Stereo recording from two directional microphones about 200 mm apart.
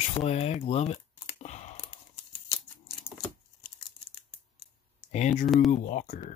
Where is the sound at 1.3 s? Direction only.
35° left (ahead or behind).